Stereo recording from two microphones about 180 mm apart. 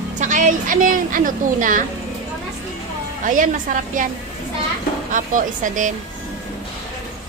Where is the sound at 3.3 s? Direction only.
45° right (ahead or behind).